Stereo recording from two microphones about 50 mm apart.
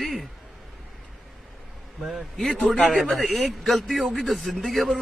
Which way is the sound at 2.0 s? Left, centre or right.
Centre.